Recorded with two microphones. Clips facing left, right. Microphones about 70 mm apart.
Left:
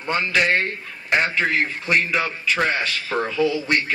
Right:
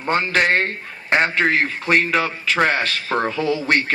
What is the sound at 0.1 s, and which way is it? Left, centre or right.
A man's voice, right.